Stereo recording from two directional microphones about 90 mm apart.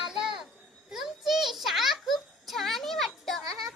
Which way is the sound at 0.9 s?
5° right (ahead or behind).